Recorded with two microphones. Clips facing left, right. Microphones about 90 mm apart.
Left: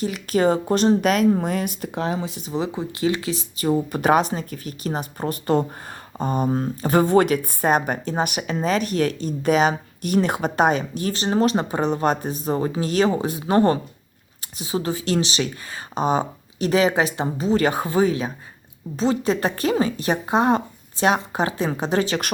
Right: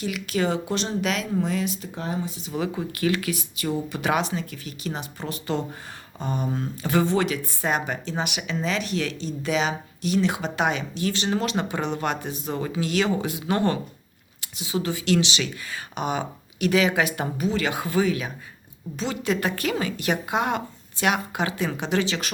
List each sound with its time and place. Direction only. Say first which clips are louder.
0.0 s speech: left 6 dB; 40° left (ahead or behind); by 1.9 s 55° left (ahead or behind)
2.0 s speech: left 6 dB; 85° left
2.5 s speech: left 3 dB; 20° left (ahead or behind); by 22.3 s 45° left (ahead or behind)